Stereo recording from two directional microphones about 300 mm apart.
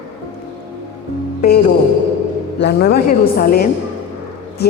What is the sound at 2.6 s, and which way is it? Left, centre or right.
A woman's voice, left.